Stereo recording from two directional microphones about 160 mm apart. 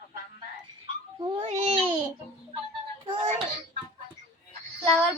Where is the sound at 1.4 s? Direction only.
35° right (ahead or behind).